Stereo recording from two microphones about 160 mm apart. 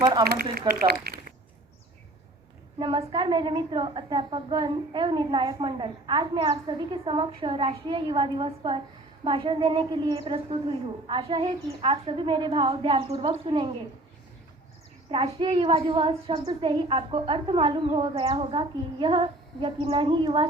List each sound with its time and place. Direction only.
0.0 s speech: 25° right (ahead or behind)
0.3 s speech: 70° right (ahead or behind)
2.7 s a woman's voice: 30° right (ahead or behind)
15.1 s a woman's voice: 35° right (ahead or behind)